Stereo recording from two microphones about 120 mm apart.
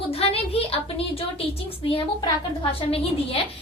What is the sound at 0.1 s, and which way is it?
A woman's voice, 55° left (ahead or behind).